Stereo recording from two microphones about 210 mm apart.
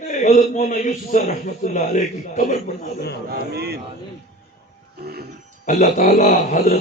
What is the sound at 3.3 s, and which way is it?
Speech, 50° right (ahead or behind).